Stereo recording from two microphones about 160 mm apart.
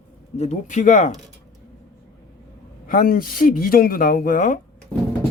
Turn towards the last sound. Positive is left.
turn(degrees=5)  # may be behind; listen again after turning